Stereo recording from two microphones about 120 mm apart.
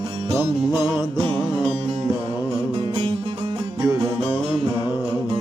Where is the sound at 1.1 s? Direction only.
50° right (ahead or behind).